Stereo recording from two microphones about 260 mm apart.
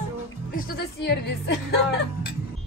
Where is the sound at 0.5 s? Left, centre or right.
Left.